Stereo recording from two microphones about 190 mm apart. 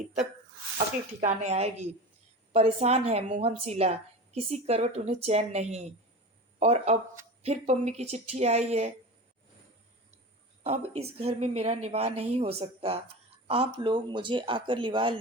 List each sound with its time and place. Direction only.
1.2 s a woman's voice: 40° right (ahead or behind)
10.6 s a woman's voice: 30° right (ahead or behind)